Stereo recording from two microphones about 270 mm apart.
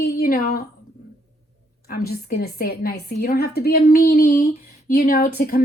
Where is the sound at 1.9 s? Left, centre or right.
Left.